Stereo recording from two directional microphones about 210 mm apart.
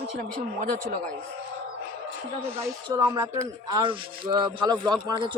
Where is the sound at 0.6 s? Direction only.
35° right (ahead or behind).